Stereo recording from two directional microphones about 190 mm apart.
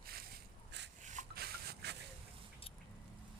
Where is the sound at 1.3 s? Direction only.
55° right (ahead or behind).